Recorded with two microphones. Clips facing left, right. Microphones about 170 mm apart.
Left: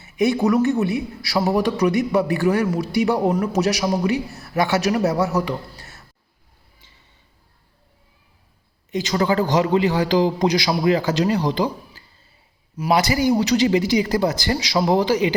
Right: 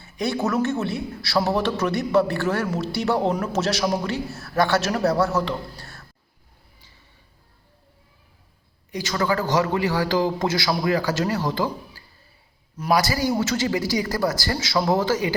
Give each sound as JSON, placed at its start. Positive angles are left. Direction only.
{"t": 0.0, "sound": "a man's voice", "side_deg": 15}
{"t": 8.9, "sound": "a man's voice", "side_deg": 20}